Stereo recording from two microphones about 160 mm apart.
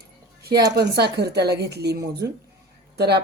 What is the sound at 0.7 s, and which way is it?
A woman's voice, 90° right.